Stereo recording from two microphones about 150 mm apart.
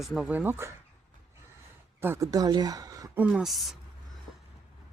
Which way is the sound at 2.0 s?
15° right (ahead or behind).